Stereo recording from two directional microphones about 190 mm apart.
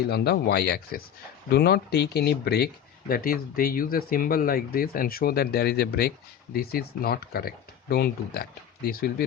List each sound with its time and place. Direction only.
0.1 s speech: 55° left (ahead or behind)